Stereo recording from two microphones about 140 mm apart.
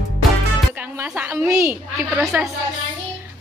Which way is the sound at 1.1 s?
15° right (ahead or behind).